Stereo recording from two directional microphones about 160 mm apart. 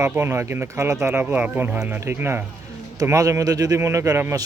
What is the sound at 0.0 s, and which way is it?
Speech, 15° right (ahead or behind).